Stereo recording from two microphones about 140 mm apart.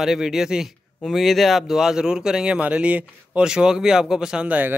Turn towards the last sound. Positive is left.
turn(degrees=-10)  # may be behind; listen again after turning